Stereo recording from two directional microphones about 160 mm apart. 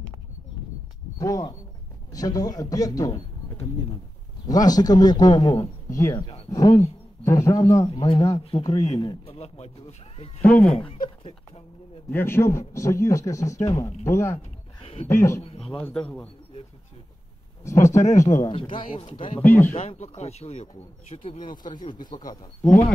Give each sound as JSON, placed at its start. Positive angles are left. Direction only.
{"t": 1.1, "sound": "a man's voice", "side_deg": 20}
{"t": 9.2, "sound": "speech", "side_deg": 40}
{"t": 10.4, "sound": "speech", "side_deg": 10}
{"t": 12.1, "sound": "a man's voice", "side_deg": 15}
{"t": 14.8, "sound": "a sound", "side_deg": 40}
{"t": 15.0, "sound": "speech", "side_deg": 15}
{"t": 15.4, "sound": "a sound", "side_deg": 40}
{"t": 15.7, "sound": "speech", "side_deg": 5}
{"t": 17.6, "sound": "a man's voice", "side_deg": 20}
{"t": 18.5, "sound": "speech", "side_deg": 35}
{"t": 19.4, "sound": "speech", "side_deg": 10}
{"t": 19.7, "sound": "a man's voice", "side_deg": 40}